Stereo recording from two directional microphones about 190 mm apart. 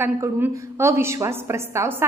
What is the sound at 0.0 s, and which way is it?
A woman's voice, 10° right (ahead or behind).